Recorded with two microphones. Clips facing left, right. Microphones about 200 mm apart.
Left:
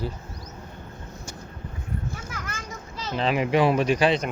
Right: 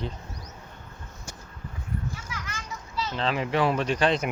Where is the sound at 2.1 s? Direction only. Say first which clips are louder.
Left 3 dB; 50° left (ahead or behind).